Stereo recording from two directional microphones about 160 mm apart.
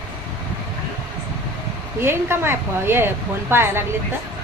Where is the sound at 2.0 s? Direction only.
15° right (ahead or behind).